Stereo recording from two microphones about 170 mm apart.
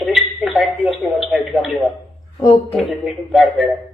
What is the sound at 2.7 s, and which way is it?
Speech, centre (ahead or behind).